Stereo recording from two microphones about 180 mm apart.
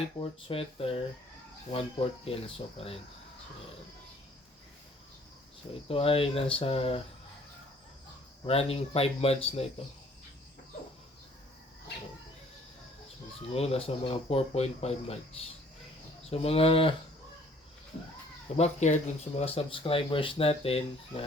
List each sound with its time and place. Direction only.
0.2 s speech: 30° left (ahead or behind)
5.9 s speech: 30° left (ahead or behind)
8.4 s speech: 35° left (ahead or behind)
13.5 s speech: 35° left (ahead or behind)
18.5 s speech: 40° left (ahead or behind)